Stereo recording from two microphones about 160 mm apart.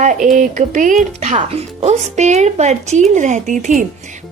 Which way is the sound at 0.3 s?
50° right (ahead or behind).